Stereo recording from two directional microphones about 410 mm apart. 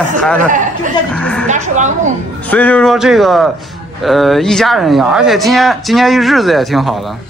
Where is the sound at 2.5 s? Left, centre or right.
Centre.